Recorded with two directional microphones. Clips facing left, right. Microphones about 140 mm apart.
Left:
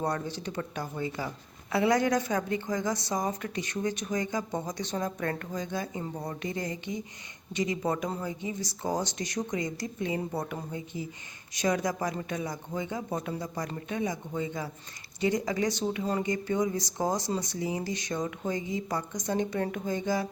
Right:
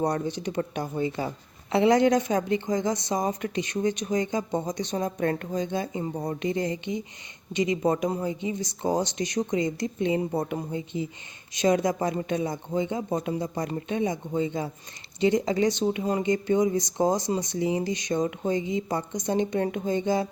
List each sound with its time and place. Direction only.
0.0 s a woman's voice: 20° right (ahead or behind)